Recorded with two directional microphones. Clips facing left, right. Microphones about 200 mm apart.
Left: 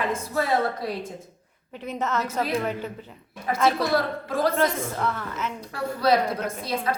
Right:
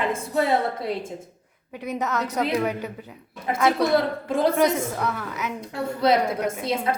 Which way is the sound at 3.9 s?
25° right (ahead or behind).